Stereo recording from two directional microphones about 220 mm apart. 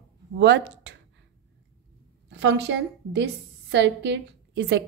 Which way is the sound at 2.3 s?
55° right (ahead or behind).